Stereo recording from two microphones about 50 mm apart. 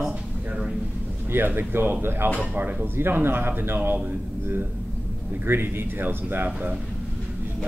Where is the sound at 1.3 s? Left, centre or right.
Right.